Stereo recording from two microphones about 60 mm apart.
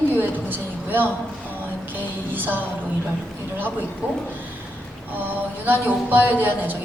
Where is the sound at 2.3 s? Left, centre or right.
Right.